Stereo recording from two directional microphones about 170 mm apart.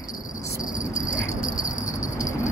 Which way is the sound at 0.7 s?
50° left (ahead or behind).